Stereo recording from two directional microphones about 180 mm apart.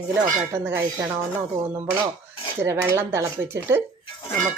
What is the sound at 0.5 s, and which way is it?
Speech, 15° right (ahead or behind).